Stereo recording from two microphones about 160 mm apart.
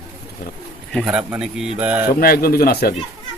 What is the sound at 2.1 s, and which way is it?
Speech, 70° left (ahead or behind).